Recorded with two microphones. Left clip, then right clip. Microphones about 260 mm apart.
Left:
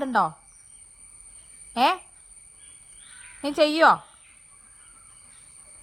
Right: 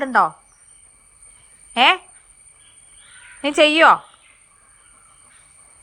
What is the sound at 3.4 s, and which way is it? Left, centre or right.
Speech, left.